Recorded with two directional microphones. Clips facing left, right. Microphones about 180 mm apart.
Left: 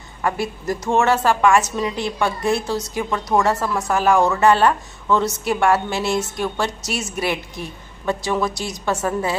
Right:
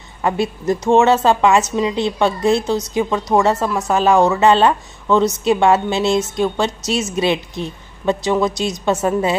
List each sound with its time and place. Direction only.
0.2 s a woman's voice: 25° right (ahead or behind)